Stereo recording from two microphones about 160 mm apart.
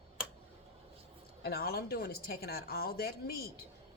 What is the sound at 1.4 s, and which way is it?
A woman's voice, 75° left (ahead or behind).